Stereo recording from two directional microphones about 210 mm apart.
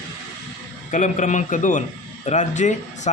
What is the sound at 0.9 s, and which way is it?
Speech, 35° left (ahead or behind).